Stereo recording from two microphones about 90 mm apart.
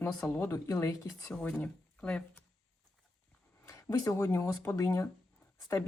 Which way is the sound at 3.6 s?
40° left (ahead or behind).